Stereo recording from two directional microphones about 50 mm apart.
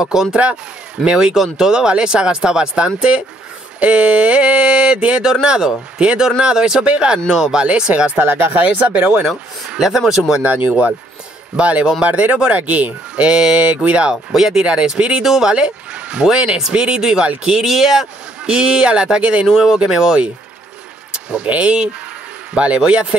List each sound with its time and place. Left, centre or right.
0.0 s speech: centre
0.3 s speech: right
1.0 s speech: centre
7.2 s speech: centre
7.5 s speech: centre
8.2 s speech: right
9.8 s speech: centre
10.3 s speech: right
13.1 s speech: centre
14.1 s speech: centre
15.5 s speech: centre
19.4 s speech: centre
21.1 s vehicle: centre
21.5 s speech: right